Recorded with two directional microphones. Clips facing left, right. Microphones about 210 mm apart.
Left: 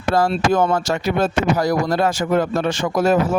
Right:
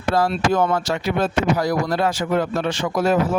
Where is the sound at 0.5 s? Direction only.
45° left (ahead or behind).